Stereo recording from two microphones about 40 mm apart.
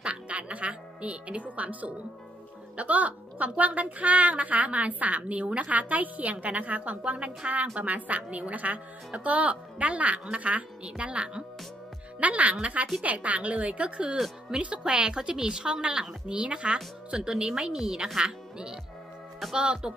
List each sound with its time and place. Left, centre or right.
0.0 s a woman's voice: right
16.3 s a woman's voice: right